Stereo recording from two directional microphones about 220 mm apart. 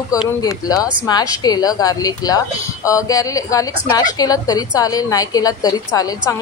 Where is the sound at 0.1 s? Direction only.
15° left (ahead or behind).